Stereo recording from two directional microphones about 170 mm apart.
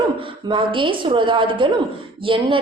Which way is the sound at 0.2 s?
30° right (ahead or behind).